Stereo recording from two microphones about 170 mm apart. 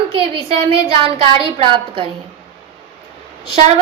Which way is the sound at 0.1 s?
35° right (ahead or behind).